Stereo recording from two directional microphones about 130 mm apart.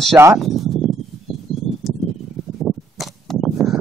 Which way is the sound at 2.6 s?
Centre (ahead or behind).